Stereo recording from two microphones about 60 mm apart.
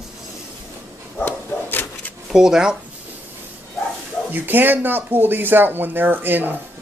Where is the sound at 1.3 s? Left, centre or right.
Left.